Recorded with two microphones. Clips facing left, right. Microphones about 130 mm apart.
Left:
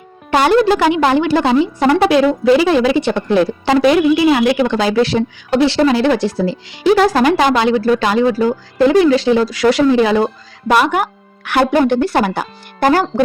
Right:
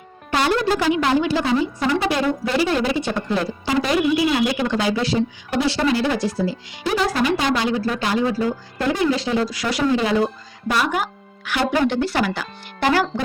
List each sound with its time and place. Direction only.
0.3 s a woman's voice: 90° left
10.7 s speech: 70° left (ahead or behind); by 13.2 s 45° left (ahead or behind)